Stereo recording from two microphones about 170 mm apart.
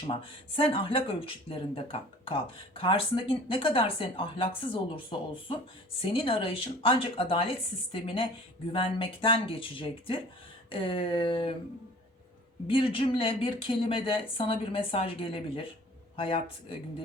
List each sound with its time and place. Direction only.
0.1 s speech: 30° left (ahead or behind)
12.6 s speech: 30° left (ahead or behind)